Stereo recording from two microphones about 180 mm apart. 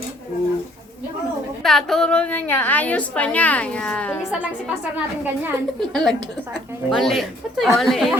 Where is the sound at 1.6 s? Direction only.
Centre (ahead or behind).